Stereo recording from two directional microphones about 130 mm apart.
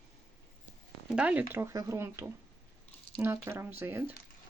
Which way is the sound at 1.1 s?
10° right (ahead or behind).